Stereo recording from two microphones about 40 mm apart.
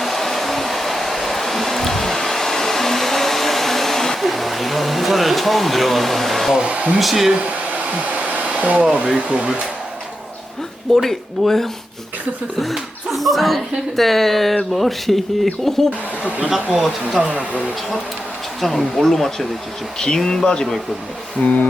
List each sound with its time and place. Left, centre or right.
0.0 s a sound: centre
4.3 s speech: centre
6.6 s speech: right
7.0 s speech: centre
7.7 s hair dryer: right
9.2 s speech: right
10.9 s speech: centre
12.7 s speech: centre
16.7 s speech: centre
18.6 s speech: centre
21.4 s a sound: left